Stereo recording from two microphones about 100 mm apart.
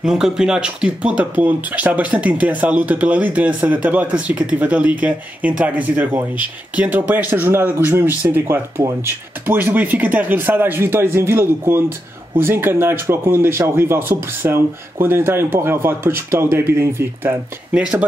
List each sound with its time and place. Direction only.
0.0 s speech: 5° right (ahead or behind); by 16.7 s 25° right (ahead or behind)